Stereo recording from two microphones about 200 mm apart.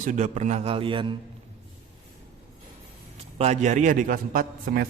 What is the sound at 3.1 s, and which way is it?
A man's voice, 30° right (ahead or behind).